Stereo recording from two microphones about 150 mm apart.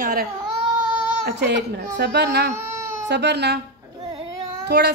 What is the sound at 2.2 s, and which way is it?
Speech, 90° right.